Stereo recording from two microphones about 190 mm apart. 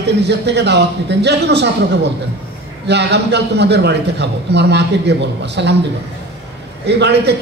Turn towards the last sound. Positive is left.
turn(degrees=-60)  # may be behind; listen again after turning